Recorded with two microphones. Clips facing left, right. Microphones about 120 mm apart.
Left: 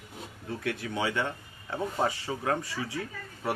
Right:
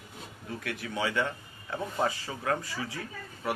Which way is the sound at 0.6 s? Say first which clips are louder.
Left 2 dB; 25° left (ahead or behind).